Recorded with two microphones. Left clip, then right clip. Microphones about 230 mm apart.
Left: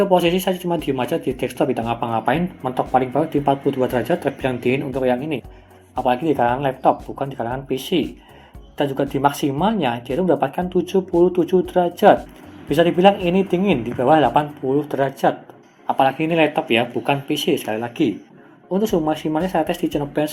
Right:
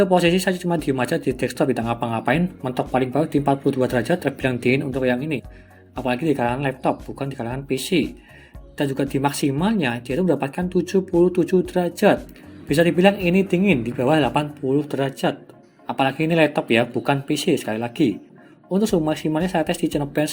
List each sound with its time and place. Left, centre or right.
0.0 s speech: right